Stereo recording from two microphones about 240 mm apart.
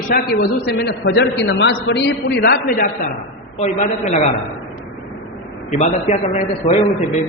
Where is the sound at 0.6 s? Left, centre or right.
Left.